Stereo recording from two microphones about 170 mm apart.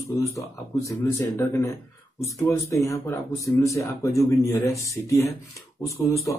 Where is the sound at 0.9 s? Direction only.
15° left (ahead or behind).